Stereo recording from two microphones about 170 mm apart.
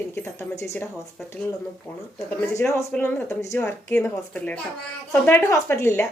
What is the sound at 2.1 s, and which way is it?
A woman's voice, 15° left (ahead or behind).